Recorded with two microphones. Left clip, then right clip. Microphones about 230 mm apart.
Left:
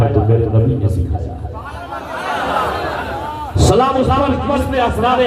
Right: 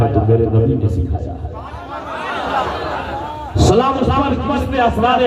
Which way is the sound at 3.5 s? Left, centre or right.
Right.